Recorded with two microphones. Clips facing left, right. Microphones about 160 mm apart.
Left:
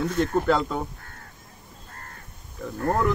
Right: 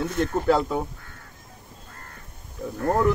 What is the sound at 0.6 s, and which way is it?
Speech, 10° right (ahead or behind).